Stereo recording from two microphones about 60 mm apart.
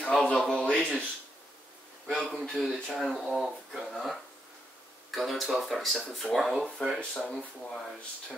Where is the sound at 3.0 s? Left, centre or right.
Centre.